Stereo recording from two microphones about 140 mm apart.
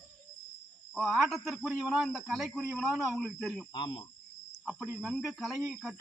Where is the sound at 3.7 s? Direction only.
35° left (ahead or behind).